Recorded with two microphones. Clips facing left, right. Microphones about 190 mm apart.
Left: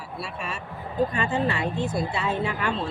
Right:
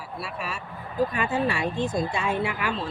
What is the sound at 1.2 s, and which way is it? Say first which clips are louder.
Speech: even; 10° right (ahead or behind).